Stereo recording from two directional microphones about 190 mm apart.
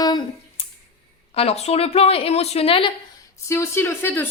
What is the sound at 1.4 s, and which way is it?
A woman's voice, 35° left (ahead or behind).